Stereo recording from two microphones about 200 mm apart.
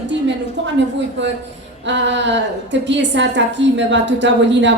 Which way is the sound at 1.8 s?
60° right (ahead or behind).